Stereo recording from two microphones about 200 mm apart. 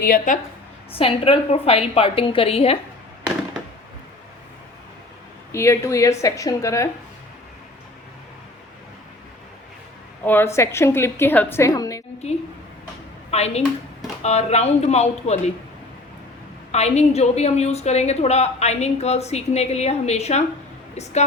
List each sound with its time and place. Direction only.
0.0 s a woman's voice: 45° left (ahead or behind)
0.9 s a woman's voice: 30° left (ahead or behind)
5.5 s a woman's voice: 15° left (ahead or behind)
10.2 s a woman's voice: 10° left (ahead or behind)
13.3 s a woman's voice: 30° left (ahead or behind)
16.7 s a woman's voice: 35° left (ahead or behind)